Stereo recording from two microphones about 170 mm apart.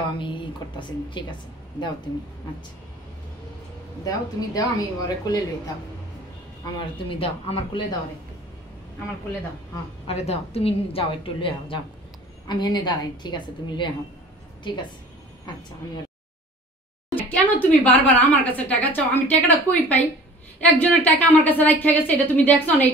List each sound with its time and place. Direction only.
0.2 s a woman's voice: 30° left (ahead or behind)
4.0 s a woman's voice: 20° left (ahead or behind)
7.1 s a woman's voice: 35° left (ahead or behind)
10.0 s a woman's voice: 35° left (ahead or behind)
17.1 s speech: 10° left (ahead or behind)